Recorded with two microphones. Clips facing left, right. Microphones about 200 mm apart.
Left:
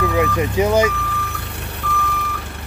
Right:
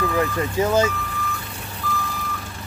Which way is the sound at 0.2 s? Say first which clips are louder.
Left 4 dB; 15° left (ahead or behind).